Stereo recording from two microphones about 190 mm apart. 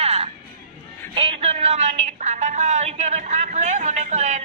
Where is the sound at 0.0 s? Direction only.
35° right (ahead or behind).